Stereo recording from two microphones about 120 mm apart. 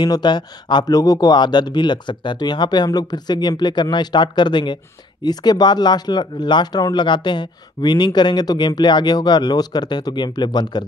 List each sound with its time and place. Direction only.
0.0 s speech: 40° left (ahead or behind)